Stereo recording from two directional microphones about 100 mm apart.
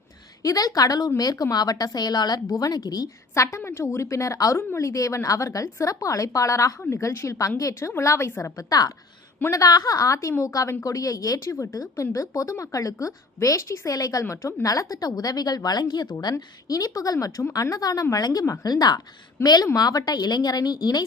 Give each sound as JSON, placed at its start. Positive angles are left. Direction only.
{"t": 0.4, "sound": "a woman's voice", "side_deg": 40}